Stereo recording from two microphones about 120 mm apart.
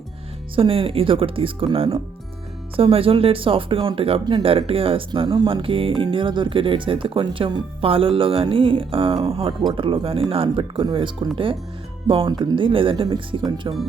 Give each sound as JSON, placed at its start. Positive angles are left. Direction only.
{"t": 0.5, "sound": "speech", "side_deg": -45}